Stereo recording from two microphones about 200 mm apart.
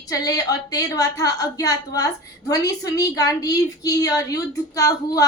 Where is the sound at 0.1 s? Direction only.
20° left (ahead or behind).